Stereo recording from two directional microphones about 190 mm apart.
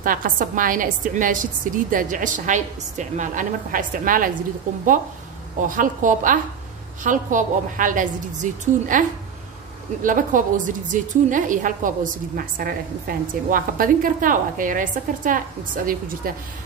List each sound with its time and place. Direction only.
0.0 s a woman's voice: 45° right (ahead or behind)
10.0 s a woman's voice: 45° right (ahead or behind)